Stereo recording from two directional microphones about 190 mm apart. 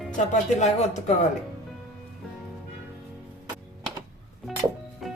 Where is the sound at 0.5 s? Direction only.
40° left (ahead or behind).